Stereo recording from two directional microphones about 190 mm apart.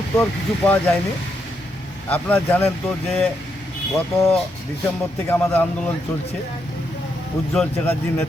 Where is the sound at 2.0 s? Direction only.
10° left (ahead or behind).